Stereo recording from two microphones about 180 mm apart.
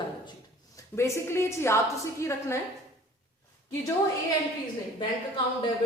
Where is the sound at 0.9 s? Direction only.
15° left (ahead or behind).